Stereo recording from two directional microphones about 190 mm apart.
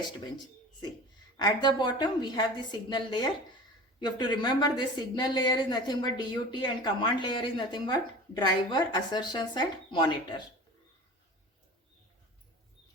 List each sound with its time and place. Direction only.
1.4 s a woman's voice: 20° left (ahead or behind)